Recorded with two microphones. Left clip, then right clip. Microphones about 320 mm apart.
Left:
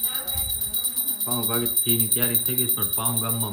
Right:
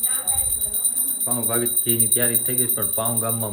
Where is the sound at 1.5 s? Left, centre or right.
Centre.